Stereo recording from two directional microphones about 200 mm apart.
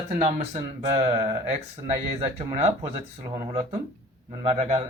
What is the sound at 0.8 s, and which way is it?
Speech, 15° right (ahead or behind).